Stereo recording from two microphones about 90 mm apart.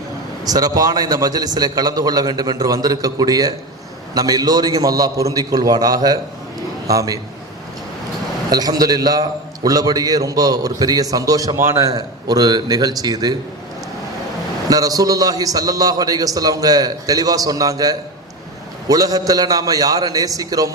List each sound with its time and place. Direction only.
0.4 s a man's voice: 45° right (ahead or behind)
8.4 s a man's voice: 45° right (ahead or behind)
11.5 s a man's voice: 30° right (ahead or behind); by 13.3 s 45° right (ahead or behind)
14.7 s a man's voice: 45° right (ahead or behind)